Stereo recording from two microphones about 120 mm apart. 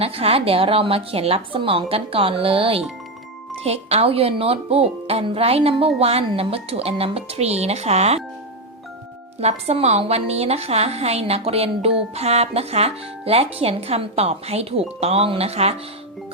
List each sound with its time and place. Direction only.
0.0 s a woman's voice: 55° right (ahead or behind)
9.4 s a woman's voice: 60° right (ahead or behind)